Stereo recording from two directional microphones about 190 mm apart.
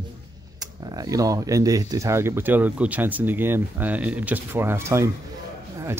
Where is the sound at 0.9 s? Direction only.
20° right (ahead or behind).